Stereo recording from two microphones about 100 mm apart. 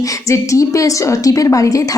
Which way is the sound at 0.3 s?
35° left (ahead or behind).